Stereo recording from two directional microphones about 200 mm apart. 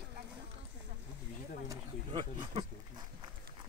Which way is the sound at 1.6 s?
25° right (ahead or behind).